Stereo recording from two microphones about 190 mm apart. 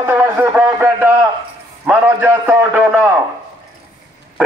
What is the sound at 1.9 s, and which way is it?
A man's voice, 10° right (ahead or behind).